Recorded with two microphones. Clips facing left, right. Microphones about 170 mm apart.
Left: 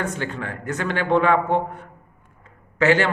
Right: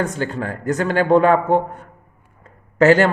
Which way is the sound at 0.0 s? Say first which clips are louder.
Right 5 dB; 35° right (ahead or behind).